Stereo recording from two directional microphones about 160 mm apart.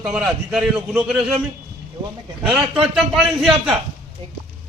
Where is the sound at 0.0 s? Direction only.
5° right (ahead or behind).